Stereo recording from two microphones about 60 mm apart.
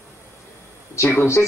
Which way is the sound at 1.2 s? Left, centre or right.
Left.